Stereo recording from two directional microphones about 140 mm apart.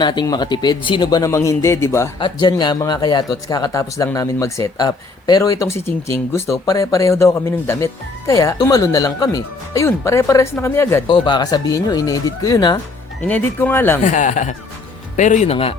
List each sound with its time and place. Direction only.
0.0 s speech: 30° left (ahead or behind)
2.1 s speech: 35° left (ahead or behind)
11.1 s speech: 30° left (ahead or behind)
13.2 s speech: 15° left (ahead or behind)
14.0 s speech: 65° left (ahead or behind)